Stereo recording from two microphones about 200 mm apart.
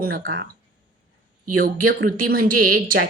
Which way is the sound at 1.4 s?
45° right (ahead or behind).